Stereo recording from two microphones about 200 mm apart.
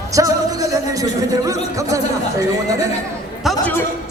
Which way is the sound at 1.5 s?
15° right (ahead or behind).